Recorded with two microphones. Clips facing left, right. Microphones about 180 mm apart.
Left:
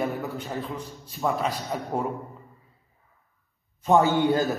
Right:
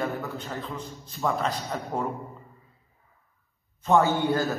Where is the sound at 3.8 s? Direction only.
15° left (ahead or behind).